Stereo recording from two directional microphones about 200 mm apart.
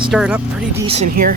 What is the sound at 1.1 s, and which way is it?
Speech, 45° right (ahead or behind).